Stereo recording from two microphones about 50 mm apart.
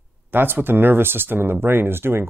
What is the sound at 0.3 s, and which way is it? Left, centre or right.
Speech, right.